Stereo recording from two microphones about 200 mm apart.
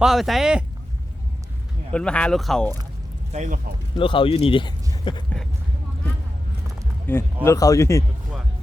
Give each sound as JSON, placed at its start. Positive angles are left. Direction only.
{"t": 0.0, "sound": "speech", "side_deg": 0}
{"t": 1.9, "sound": "speech", "side_deg": 5}
{"t": 3.3, "sound": "speech", "side_deg": -35}
{"t": 3.9, "sound": "speech", "side_deg": 25}
{"t": 7.1, "sound": "speech", "side_deg": 10}